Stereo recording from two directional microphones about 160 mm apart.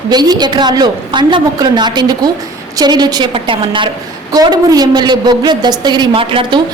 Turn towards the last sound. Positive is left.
turn(degrees=-35)  # may be behind; listen again after turning